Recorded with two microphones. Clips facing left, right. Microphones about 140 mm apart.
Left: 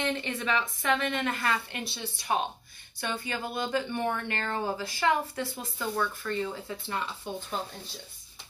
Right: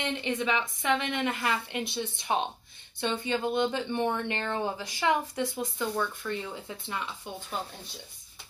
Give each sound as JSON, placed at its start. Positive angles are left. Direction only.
{"t": 0.0, "sound": "speech", "side_deg": -20}